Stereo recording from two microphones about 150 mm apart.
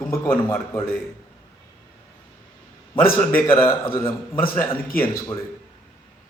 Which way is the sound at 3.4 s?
15° left (ahead or behind).